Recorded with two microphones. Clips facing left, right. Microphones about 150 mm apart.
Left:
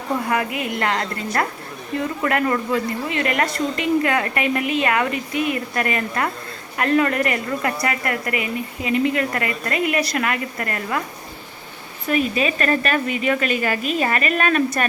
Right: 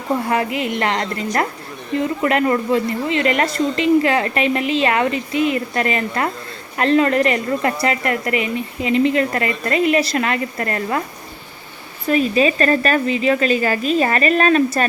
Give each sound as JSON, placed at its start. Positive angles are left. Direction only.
{"t": 0.3, "sound": "a woman's voice", "side_deg": -25}
{"t": 12.0, "sound": "speech", "side_deg": -30}